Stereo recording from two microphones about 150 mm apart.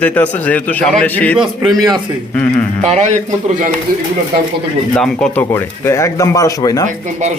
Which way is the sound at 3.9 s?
85° right.